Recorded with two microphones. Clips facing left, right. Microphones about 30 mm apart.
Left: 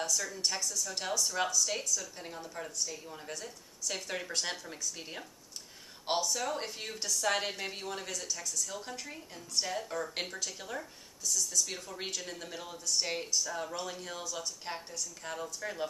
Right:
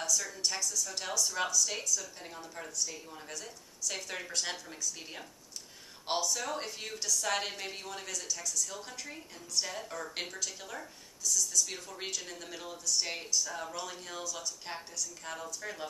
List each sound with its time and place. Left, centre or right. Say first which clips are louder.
0.7 s a woman's voice: left 1 dB; centre
14.2 s a woman's voice: even; centre